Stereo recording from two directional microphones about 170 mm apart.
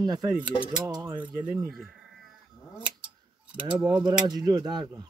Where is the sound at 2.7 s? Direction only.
5° right (ahead or behind).